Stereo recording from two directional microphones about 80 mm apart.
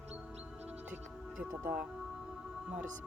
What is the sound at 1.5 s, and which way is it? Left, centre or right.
Speech, right.